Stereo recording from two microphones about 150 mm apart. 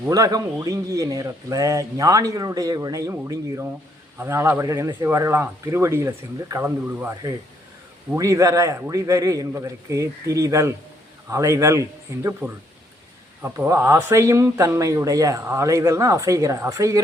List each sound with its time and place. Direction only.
0.1 s speech: 25° right (ahead or behind)